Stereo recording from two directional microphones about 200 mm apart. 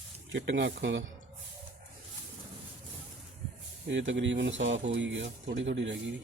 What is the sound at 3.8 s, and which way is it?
Speech, 65° right (ahead or behind).